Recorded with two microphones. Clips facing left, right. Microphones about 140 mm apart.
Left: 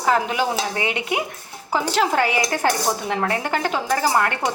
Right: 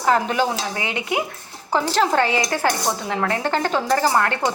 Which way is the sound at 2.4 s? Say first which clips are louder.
Even; 20° left (ahead or behind).